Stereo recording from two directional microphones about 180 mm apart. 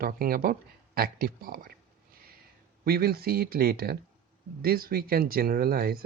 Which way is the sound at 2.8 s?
60° right (ahead or behind).